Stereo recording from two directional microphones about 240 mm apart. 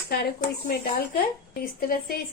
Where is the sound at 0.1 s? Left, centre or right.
Left.